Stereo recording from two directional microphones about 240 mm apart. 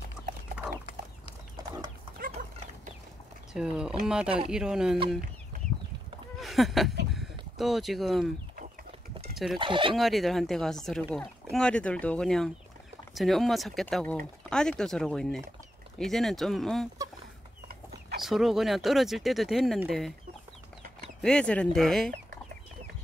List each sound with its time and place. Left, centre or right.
1.6 s chicken: centre
2.1 s chicken: right
3.5 s speech: centre
6.4 s a sound: centre
7.2 s speech: centre
9.6 s speech: right
9.9 s speech: centre
18.2 s speech: centre
21.2 s speech: centre